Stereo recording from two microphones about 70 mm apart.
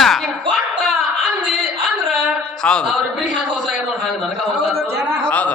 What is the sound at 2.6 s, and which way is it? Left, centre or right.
Speech, centre.